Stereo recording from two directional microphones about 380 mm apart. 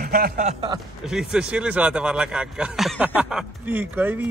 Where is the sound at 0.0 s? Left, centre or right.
Right.